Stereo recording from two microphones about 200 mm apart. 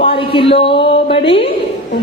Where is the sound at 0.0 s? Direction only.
25° left (ahead or behind).